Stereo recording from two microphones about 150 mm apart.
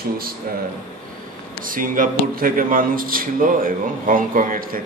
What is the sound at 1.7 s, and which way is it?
A man's voice, 65° right (ahead or behind).